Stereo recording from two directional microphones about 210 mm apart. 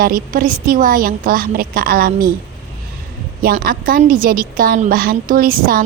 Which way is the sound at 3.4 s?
45° right (ahead or behind).